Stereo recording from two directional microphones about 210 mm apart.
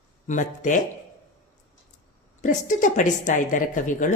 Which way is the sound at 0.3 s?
35° left (ahead or behind).